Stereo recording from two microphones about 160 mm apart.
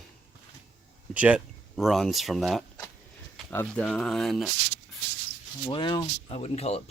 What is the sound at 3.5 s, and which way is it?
Speech, 10° left (ahead or behind).